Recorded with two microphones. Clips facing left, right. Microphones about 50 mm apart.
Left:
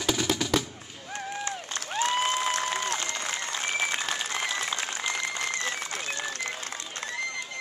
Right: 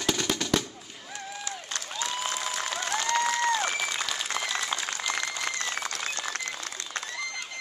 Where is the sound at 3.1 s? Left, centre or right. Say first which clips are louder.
Right 8 dB; right.